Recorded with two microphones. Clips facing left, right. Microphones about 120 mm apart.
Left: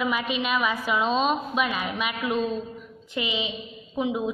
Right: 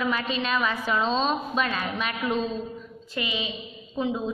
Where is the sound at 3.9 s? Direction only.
15° left (ahead or behind).